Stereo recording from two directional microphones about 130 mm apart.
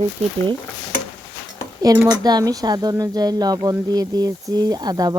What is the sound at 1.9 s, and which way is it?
Speech, 30° right (ahead or behind).